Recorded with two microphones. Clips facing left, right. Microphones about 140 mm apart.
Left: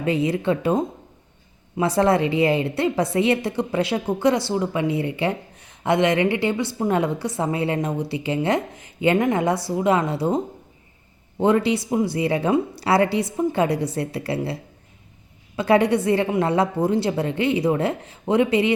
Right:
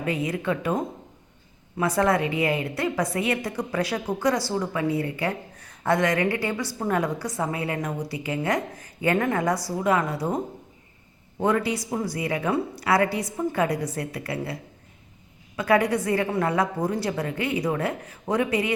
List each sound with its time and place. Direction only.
0.0 s a woman's voice: 30° left (ahead or behind)